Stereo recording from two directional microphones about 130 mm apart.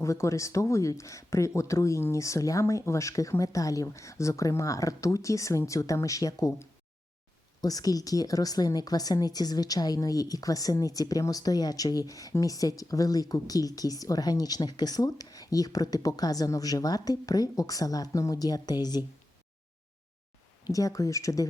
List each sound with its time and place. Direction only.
0.0 s a woman's voice: 25° left (ahead or behind)
20.7 s a woman's voice: 25° left (ahead or behind)